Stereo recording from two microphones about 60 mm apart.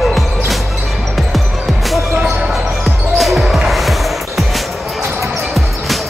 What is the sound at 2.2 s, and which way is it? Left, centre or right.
Basketball bounce, centre.